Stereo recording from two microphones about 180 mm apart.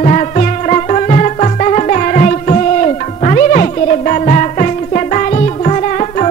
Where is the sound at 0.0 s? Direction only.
45° left (ahead or behind).